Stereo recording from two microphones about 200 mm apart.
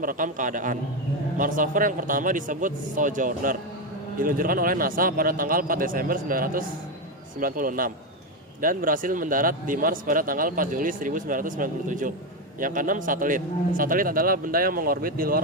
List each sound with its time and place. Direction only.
0.0 s a man's voice: 40° right (ahead or behind)